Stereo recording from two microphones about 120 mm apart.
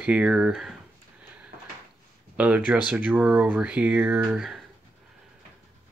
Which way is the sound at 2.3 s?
10° right (ahead or behind).